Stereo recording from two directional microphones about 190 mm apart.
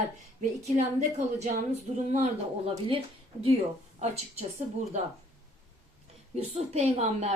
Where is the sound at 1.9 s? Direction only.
35° right (ahead or behind).